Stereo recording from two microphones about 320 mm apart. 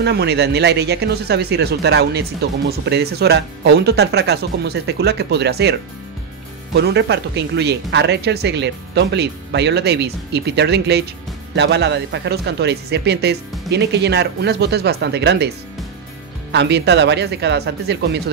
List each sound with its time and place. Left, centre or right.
0.0 s speech: right
16.5 s speech: right